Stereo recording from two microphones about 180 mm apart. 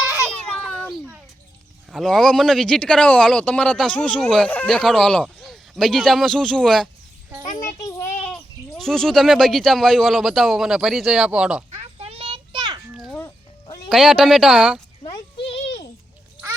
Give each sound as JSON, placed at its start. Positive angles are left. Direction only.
{"t": 0.0, "sound": "baby cry", "side_deg": -10}
{"t": 0.4, "sound": "a sound", "side_deg": 5}
{"t": 1.9, "sound": "speech", "side_deg": 0}
{"t": 7.5, "sound": "a sound", "side_deg": 20}
{"t": 8.8, "sound": "speech", "side_deg": 0}
{"t": 11.7, "sound": "children playing", "side_deg": -35}
{"t": 12.9, "sound": "a sound", "side_deg": -5}
{"t": 13.1, "sound": "cat", "side_deg": 15}
{"t": 13.9, "sound": "speech", "side_deg": 0}